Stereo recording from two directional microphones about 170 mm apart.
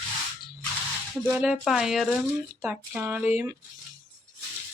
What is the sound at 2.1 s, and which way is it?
Speech, 10° left (ahead or behind).